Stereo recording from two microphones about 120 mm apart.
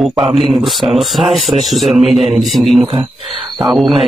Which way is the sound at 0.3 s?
Centre (ahead or behind).